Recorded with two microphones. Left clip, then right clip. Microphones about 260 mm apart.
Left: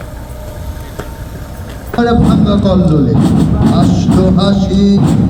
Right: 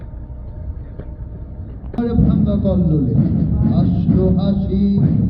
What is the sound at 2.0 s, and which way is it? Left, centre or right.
Music, left.